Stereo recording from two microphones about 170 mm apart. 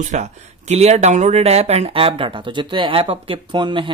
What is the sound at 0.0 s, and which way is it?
Speech, 45° right (ahead or behind).